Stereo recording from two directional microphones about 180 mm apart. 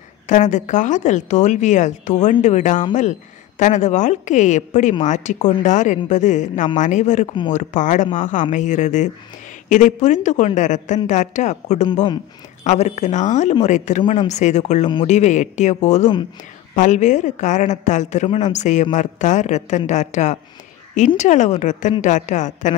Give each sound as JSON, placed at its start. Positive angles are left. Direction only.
{"t": 0.3, "sound": "a woman's voice", "side_deg": 45}